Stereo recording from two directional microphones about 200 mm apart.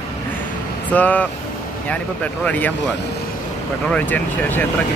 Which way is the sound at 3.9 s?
5° left (ahead or behind).